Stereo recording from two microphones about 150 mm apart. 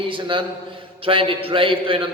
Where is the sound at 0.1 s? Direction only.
35° right (ahead or behind).